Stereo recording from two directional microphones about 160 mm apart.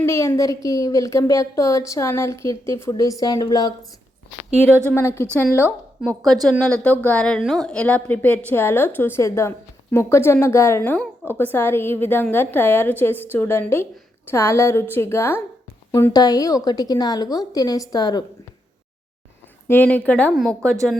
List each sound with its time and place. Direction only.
0.0 s a woman's voice: 15° left (ahead or behind)
4.9 s a woman's voice: 15° left (ahead or behind)
6.0 s a woman's voice: centre (ahead or behind); by 18.3 s 25° left (ahead or behind)
19.6 s a woman's voice: 10° left (ahead or behind)
20.3 s a woman's voice: 5° right (ahead or behind)